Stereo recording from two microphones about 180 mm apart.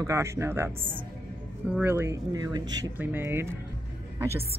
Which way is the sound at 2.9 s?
10° right (ahead or behind).